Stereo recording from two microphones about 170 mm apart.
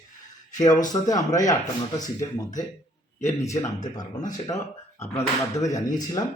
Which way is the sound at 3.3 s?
20° left (ahead or behind).